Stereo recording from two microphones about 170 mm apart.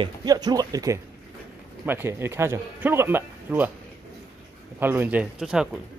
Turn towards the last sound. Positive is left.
turn(degrees=-5)  # may be behind; listen again after turning